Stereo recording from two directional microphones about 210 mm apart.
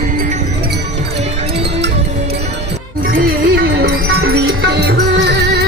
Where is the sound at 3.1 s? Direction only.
50° right (ahead or behind).